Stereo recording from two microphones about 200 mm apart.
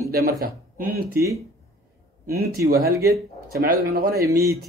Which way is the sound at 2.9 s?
15° right (ahead or behind).